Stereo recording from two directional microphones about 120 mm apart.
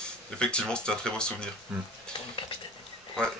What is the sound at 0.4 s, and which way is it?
Speech, 5° left (ahead or behind).